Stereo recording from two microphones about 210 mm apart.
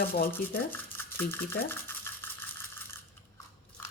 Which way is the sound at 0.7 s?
10° left (ahead or behind).